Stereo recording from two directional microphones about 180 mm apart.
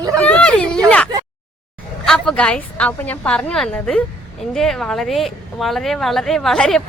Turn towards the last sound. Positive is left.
turn(degrees=0)  # may be behind; listen again after turning